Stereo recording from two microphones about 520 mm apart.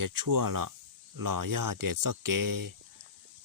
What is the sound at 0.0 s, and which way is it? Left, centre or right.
Speech, right.